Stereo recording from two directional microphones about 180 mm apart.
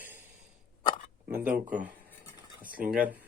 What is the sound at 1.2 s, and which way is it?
Speech, 10° right (ahead or behind).